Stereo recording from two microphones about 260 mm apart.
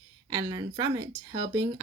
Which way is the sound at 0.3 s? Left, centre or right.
Centre.